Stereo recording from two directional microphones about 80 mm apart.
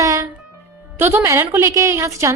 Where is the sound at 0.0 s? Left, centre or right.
Right.